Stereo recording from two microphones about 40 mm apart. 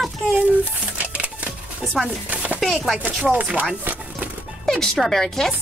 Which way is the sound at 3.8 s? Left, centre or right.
Right.